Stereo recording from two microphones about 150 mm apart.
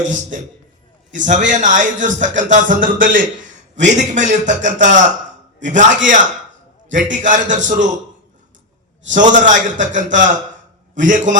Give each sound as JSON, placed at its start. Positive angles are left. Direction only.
{"t": 0.0, "sound": "a man's voice", "side_deg": -55}
{"t": 3.8, "sound": "a man's voice", "side_deg": -55}
{"t": 9.0, "sound": "a man's voice", "side_deg": -55}